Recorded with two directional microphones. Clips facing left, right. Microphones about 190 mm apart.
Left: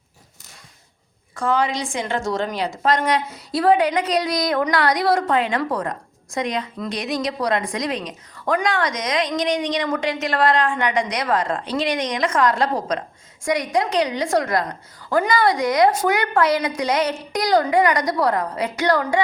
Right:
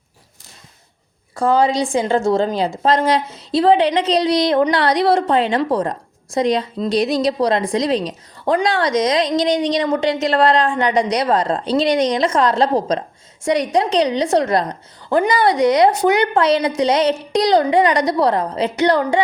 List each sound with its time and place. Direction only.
1.4 s a woman's voice: 30° right (ahead or behind)